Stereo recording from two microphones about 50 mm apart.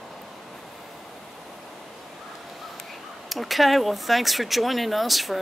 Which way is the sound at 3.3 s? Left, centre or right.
Centre.